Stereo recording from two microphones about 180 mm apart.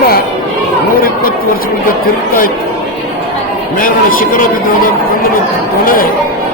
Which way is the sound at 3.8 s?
50° left (ahead or behind).